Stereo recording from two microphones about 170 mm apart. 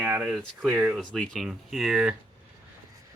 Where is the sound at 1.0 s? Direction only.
5° left (ahead or behind).